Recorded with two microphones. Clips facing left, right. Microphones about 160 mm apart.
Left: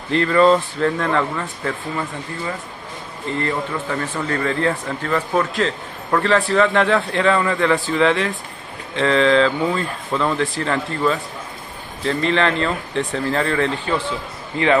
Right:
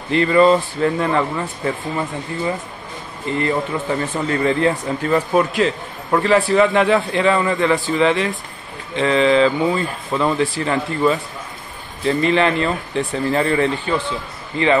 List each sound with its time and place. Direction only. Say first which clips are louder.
0.1 s speech: right 1 dB; 5° right (ahead or behind)